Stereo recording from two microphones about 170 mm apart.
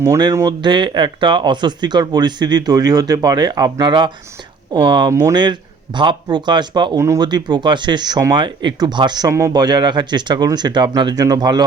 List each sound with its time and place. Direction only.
0.0 s speech: 20° right (ahead or behind)